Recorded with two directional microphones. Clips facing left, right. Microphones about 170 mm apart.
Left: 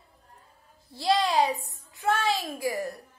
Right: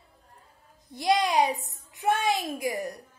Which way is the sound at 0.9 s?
15° right (ahead or behind).